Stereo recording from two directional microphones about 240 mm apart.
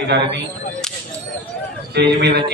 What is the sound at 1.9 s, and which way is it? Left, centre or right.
Speech, right.